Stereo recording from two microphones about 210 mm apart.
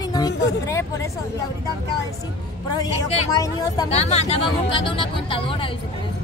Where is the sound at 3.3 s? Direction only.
15° left (ahead or behind).